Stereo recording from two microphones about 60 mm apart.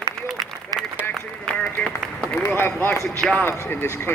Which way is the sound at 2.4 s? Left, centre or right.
Left.